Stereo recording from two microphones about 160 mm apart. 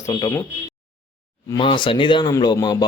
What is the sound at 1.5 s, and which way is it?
Speech, 30° left (ahead or behind).